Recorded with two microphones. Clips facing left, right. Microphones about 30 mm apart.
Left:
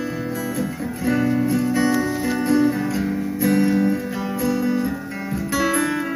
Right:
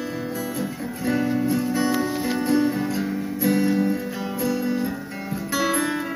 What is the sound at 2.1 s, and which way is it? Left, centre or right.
Music, right.